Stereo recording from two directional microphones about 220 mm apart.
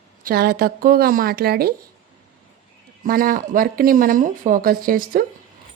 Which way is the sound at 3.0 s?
40° right (ahead or behind).